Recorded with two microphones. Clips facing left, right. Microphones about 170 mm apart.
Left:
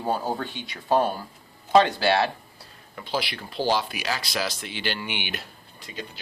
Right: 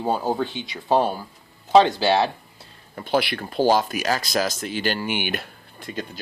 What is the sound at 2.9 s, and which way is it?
Speech, 55° right (ahead or behind).